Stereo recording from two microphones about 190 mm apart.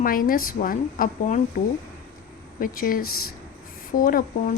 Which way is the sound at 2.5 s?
45° left (ahead or behind).